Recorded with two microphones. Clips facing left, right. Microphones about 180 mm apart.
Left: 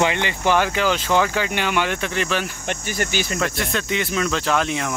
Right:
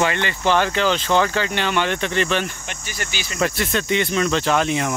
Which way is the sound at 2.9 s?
50° left (ahead or behind).